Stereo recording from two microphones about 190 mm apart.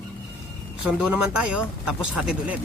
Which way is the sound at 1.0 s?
5° right (ahead or behind).